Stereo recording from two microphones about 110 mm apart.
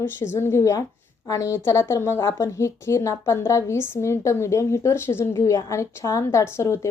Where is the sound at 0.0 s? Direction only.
20° left (ahead or behind).